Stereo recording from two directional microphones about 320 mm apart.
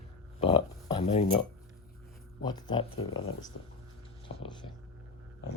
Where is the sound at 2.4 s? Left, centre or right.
Centre.